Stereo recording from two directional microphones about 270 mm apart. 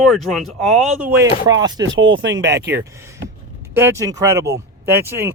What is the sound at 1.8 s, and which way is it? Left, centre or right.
Speech, right.